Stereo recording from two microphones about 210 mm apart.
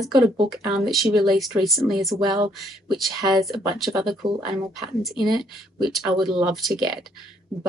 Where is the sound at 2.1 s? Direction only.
20° right (ahead or behind).